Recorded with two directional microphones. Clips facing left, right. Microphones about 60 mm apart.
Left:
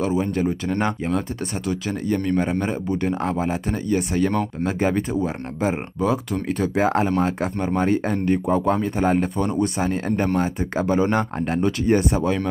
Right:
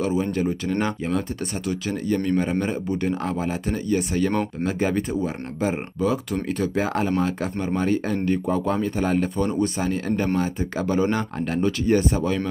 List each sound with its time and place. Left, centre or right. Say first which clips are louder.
0.0 s speech: left 1 dB; centre; by 9.3 s left
9.4 s speech: left 1 dB; centre
9.8 s speech: left 2 dB; left